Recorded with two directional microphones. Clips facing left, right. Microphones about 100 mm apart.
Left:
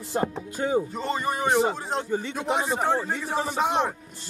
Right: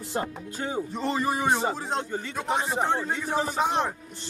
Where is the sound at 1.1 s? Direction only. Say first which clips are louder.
Left 2 dB; 5° right (ahead or behind).